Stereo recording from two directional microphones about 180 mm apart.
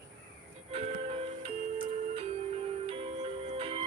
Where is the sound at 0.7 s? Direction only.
35° right (ahead or behind).